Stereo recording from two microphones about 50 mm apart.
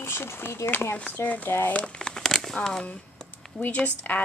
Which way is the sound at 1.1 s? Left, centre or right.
Left.